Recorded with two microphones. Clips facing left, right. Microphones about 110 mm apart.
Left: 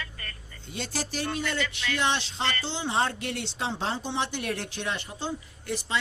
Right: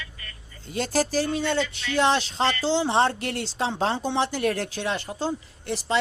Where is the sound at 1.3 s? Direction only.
30° right (ahead or behind).